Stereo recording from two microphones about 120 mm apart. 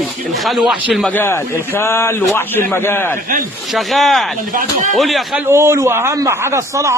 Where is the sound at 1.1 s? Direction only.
20° left (ahead or behind).